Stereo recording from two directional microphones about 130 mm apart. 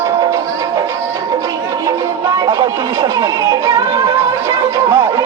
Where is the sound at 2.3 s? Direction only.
30° right (ahead or behind).